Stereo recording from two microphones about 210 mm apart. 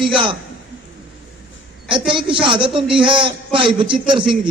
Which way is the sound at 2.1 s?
25° right (ahead or behind).